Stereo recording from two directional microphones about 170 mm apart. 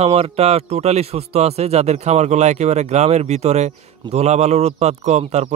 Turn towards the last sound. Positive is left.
turn(degrees=-40)  # may be behind; listen again after turning